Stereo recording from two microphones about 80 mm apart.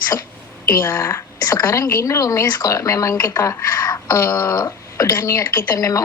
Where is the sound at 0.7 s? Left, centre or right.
Left.